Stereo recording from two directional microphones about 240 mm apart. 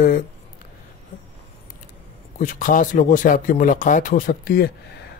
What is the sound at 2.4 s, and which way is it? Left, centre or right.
Speech, left.